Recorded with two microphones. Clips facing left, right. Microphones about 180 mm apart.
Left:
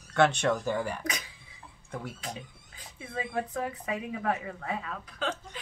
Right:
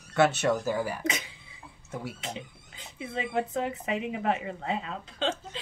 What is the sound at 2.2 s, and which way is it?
Speech, 25° right (ahead or behind).